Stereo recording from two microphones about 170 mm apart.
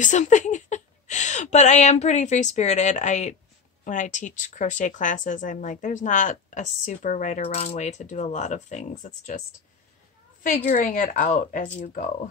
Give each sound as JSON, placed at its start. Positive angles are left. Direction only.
{"t": 0.0, "sound": "speech", "side_deg": 45}
{"t": 10.4, "sound": "speech", "side_deg": 55}